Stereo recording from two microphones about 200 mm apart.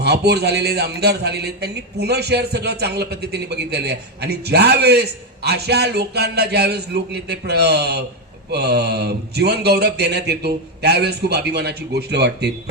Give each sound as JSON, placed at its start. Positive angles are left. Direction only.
{"t": 0.0, "sound": "a man's voice", "side_deg": -55}